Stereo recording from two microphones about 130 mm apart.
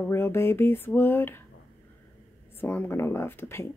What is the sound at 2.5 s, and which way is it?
Speech, 15° left (ahead or behind).